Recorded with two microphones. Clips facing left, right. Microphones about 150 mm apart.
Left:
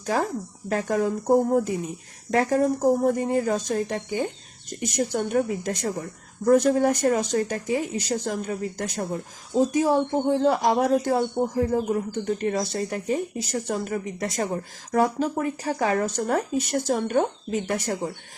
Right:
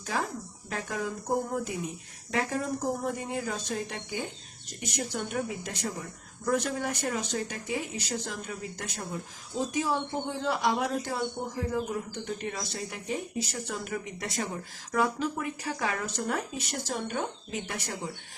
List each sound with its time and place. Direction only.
0.0 s a woman's voice: 45° left (ahead or behind)